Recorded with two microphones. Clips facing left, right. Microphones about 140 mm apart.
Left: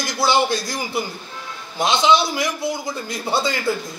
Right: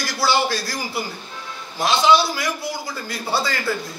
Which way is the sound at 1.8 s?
20° left (ahead or behind).